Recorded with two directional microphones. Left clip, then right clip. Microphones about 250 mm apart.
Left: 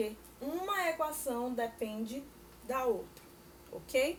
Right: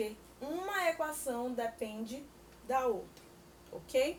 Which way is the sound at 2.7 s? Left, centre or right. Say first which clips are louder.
Right 2 dB; centre.